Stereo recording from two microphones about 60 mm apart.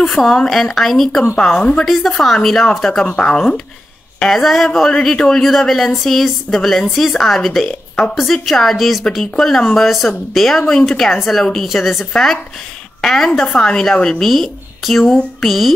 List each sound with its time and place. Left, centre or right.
0.0 s speech: centre
1.6 s a woman's voice: centre
1.9 s a woman's voice: centre
14.2 s speech: centre